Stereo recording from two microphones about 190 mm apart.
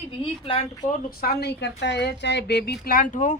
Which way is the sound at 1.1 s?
55° left (ahead or behind).